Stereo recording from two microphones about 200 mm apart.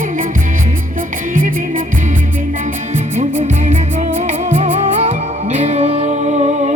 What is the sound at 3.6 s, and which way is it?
Music, 35° right (ahead or behind).